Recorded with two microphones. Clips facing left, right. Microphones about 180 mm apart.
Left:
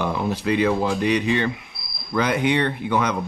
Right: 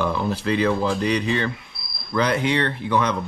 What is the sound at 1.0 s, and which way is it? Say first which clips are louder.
Speech: left 2 dB; 35° right (ahead or behind).